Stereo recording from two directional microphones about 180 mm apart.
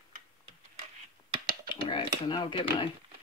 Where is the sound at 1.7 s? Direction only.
25° left (ahead or behind).